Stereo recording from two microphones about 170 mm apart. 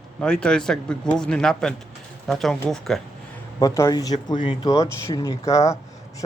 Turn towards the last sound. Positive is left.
turn(degrees=20)  # may be behind; listen again after turning